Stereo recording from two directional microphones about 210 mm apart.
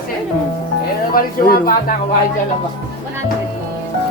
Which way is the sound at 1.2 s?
45° left (ahead or behind).